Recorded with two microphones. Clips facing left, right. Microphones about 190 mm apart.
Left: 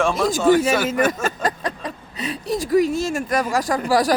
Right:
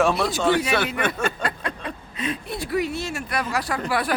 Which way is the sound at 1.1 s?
40° left (ahead or behind).